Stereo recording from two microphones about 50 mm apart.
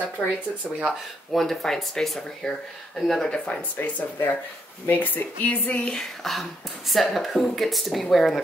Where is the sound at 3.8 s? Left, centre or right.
Left.